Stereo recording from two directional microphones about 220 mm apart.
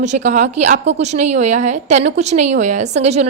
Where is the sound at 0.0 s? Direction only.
30° right (ahead or behind).